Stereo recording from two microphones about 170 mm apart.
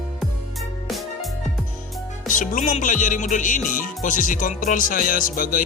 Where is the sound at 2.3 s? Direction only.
50° left (ahead or behind).